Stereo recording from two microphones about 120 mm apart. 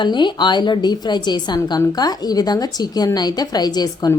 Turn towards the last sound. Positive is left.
turn(degrees=35)  # may be behind; listen again after turning